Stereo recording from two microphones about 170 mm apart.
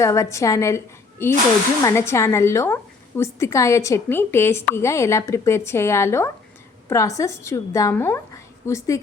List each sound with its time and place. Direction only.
0.0 s speech: 20° left (ahead or behind)